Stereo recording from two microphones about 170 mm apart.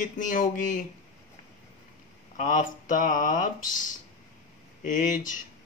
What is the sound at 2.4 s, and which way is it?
Speech, 50° left (ahead or behind).